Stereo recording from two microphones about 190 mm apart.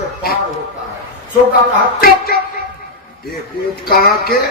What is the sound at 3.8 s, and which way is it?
Speech, 50° left (ahead or behind).